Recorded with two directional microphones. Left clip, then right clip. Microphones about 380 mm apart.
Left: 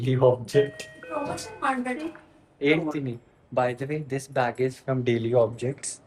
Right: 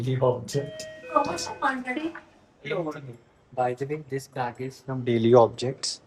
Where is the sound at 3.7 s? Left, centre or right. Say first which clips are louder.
Even; centre.